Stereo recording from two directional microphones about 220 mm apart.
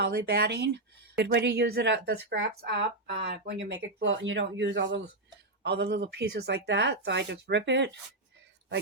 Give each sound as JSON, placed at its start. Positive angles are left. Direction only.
{"t": 0.0, "sound": "speech", "side_deg": -50}